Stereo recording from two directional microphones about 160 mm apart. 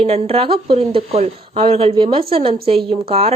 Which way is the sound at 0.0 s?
40° right (ahead or behind).